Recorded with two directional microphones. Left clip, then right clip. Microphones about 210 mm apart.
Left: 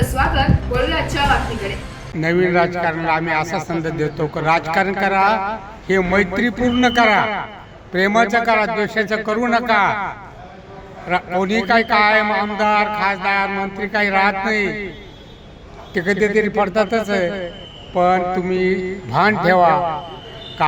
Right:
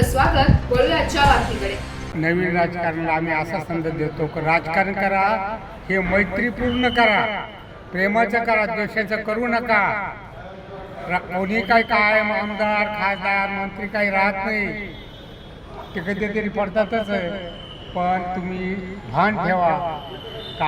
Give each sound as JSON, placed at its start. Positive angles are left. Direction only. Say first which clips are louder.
{"t": 0.0, "sound": "a sound", "louder": "even", "side_deg": 0}
{"t": 2.2, "sound": "a man's voice", "louder": "left 4 dB", "side_deg": 35}
{"t": 16.0, "sound": "a man's voice", "louder": "left 8 dB", "side_deg": 50}